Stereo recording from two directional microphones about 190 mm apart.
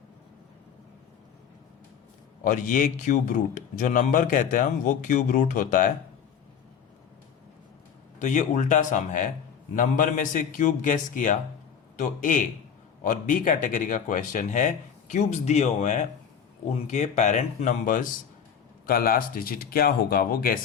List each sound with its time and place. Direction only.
2.4 s speech: 45° left (ahead or behind)
8.2 s a man's voice: 40° left (ahead or behind)